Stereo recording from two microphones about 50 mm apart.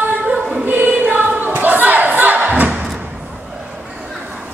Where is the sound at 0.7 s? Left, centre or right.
Right.